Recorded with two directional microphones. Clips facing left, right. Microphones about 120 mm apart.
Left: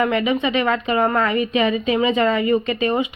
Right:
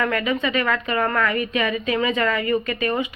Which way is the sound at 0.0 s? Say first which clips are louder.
Left 3 dB; 20° left (ahead or behind).